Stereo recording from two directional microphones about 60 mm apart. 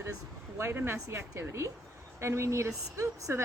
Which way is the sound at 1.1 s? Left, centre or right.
Right.